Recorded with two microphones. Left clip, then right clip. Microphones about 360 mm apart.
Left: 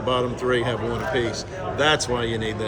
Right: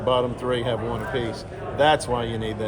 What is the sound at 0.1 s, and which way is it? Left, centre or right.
A man's voice, centre.